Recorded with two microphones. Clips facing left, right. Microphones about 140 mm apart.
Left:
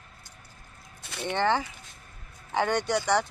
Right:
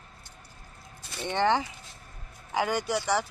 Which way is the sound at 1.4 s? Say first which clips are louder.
Right 1 dB; 15° right (ahead or behind).